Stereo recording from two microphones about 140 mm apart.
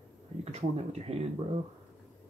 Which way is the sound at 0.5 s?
50° right (ahead or behind).